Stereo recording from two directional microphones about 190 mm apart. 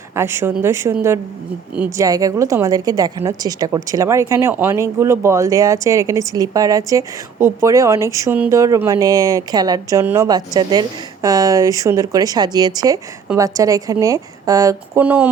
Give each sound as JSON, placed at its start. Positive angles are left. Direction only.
{"t": 0.1, "sound": "a woman's voice", "side_deg": -15}